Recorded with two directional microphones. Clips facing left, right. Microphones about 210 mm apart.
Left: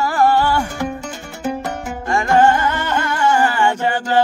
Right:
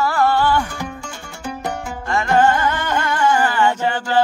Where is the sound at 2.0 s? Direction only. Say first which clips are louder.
Left 2 dB; 15° left (ahead or behind).